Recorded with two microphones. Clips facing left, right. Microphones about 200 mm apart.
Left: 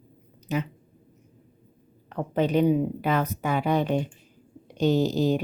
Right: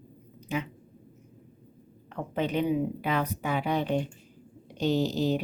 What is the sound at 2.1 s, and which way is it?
A woman's voice, 40° left (ahead or behind).